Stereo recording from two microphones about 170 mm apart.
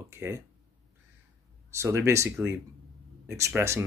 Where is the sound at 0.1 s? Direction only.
15° right (ahead or behind).